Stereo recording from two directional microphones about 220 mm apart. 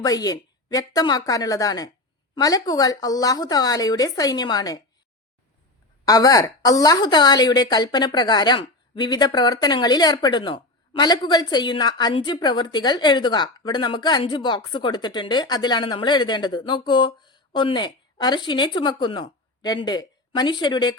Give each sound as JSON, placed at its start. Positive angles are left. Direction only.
{"t": 0.0, "sound": "speech", "side_deg": 15}
{"t": 6.1, "sound": "a woman's voice", "side_deg": 15}